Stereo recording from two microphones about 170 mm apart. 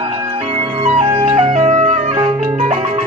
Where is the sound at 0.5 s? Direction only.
35° right (ahead or behind).